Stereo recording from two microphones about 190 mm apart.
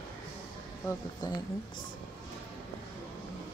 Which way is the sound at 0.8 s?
20° left (ahead or behind).